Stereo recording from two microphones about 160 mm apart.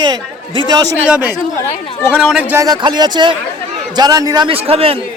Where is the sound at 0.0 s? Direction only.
30° right (ahead or behind).